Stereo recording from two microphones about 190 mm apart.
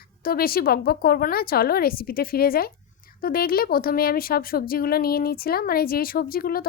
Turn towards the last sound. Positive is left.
turn(degrees=50)  # may be behind; listen again after turning